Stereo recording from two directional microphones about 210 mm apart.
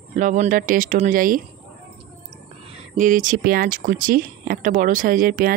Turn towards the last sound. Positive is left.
turn(degrees=-40)  # may be behind; listen again after turning